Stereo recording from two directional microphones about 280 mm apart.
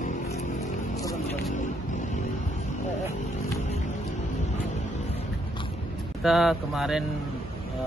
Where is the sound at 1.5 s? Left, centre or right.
Left.